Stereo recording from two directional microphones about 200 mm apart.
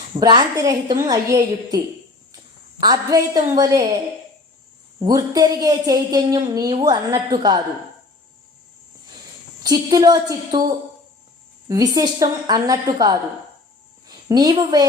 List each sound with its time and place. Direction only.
0.2 s a woman's voice: 20° right (ahead or behind)
2.8 s speech: 20° right (ahead or behind)
4.9 s speech: 20° right (ahead or behind)
9.6 s speech: 20° right (ahead or behind)
11.7 s speech: 20° right (ahead or behind)
14.3 s a woman's voice: 20° right (ahead or behind)